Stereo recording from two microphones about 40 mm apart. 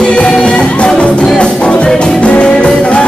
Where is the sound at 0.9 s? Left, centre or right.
Centre.